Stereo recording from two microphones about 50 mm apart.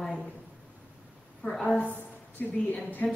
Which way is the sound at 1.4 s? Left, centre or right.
Centre.